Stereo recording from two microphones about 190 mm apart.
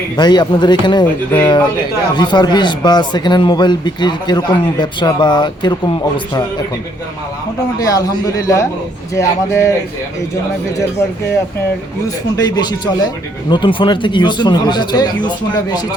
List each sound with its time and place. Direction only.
0.2 s speech: 20° left (ahead or behind)
7.8 s speech: 20° left (ahead or behind)
12.4 s speech: 20° left (ahead or behind)